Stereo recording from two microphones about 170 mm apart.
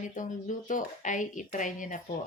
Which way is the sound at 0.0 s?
50° left (ahead or behind).